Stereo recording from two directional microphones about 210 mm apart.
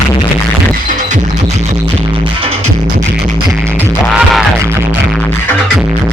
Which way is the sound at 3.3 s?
15° right (ahead or behind).